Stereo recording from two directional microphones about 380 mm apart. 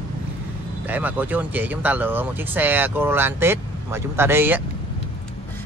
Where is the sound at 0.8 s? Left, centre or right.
Centre.